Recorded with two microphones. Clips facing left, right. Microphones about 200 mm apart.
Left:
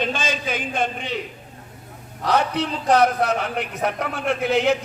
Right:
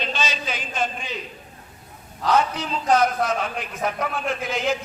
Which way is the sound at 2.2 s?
65° left (ahead or behind).